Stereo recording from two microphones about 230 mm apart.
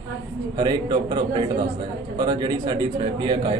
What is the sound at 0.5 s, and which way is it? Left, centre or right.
A man's voice, centre.